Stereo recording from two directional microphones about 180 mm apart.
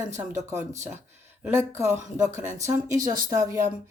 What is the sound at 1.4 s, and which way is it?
Speech, 15° right (ahead or behind).